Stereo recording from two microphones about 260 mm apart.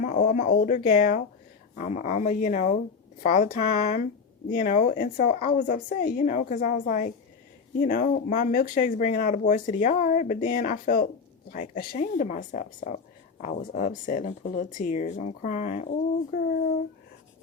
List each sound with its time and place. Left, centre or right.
0.0 s speech: left